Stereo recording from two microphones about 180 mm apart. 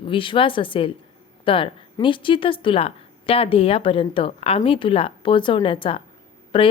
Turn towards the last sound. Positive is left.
turn(degrees=30)  # may be behind; listen again after turning